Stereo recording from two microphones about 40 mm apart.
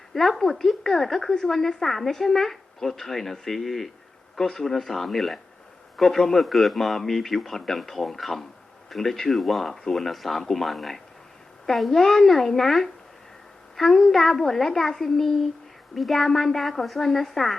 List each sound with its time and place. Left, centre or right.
0.1 s a man's voice: centre